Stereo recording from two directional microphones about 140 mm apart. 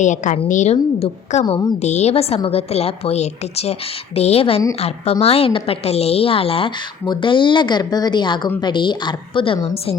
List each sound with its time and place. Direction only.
0.0 s a woman's voice: 65° left (ahead or behind)
1.5 s speech: 30° left (ahead or behind)
1.8 s a woman's voice: 55° left (ahead or behind)